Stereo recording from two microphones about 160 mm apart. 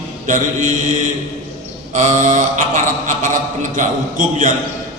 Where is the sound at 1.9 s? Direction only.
50° right (ahead or behind).